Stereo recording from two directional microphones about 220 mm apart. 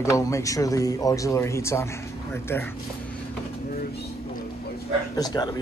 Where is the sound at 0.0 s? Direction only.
15° left (ahead or behind).